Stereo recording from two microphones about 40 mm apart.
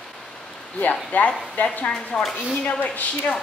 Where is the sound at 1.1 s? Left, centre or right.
Left.